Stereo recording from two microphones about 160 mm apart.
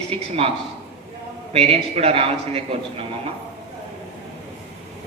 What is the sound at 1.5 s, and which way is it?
Speech, 40° right (ahead or behind).